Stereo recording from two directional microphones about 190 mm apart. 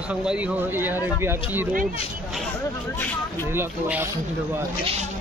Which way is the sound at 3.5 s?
10° right (ahead or behind).